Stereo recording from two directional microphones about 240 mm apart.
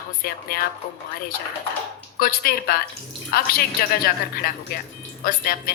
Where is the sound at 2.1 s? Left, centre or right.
Left.